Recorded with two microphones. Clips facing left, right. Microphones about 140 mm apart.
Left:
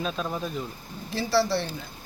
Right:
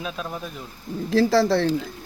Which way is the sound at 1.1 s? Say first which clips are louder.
Right 6 dB; 90° right.